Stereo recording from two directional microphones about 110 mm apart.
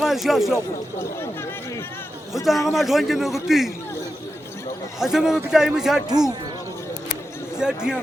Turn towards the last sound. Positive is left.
turn(degrees=-5)  # may be behind; listen again after turning